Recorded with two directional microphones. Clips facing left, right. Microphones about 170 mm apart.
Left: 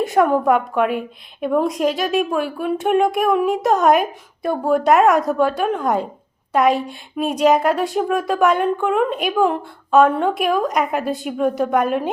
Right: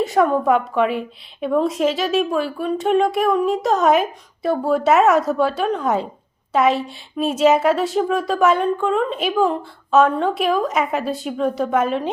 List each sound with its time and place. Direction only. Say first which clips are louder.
0.0 s a woman's voice: left 1 dB; centre (ahead or behind)
6.7 s a woman's voice: even; 45° left (ahead or behind)
7.3 s speech: even; 5° right (ahead or behind)
8.5 s a woman's voice: left 1 dB; 10° left (ahead or behind)